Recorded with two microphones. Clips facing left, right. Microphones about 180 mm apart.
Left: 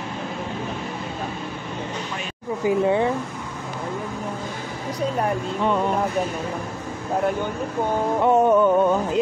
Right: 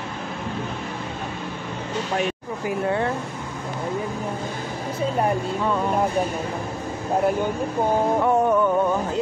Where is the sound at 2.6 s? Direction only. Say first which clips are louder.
Left 4 dB; 15° left (ahead or behind).